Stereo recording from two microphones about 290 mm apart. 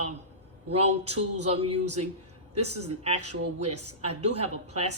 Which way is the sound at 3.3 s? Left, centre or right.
Right.